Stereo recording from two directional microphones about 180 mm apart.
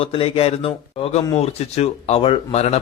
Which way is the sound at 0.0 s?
30° left (ahead or behind).